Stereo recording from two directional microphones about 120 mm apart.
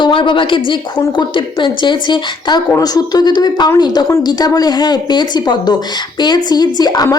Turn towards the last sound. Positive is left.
turn(degrees=30)  # may be behind; listen again after turning